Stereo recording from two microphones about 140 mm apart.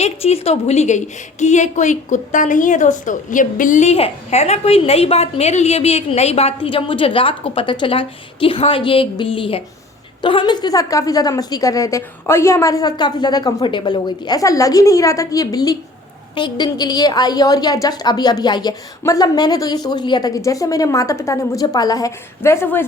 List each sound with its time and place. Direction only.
0.0 s a woman's voice: 50° left (ahead or behind); by 22.9 s 15° left (ahead or behind)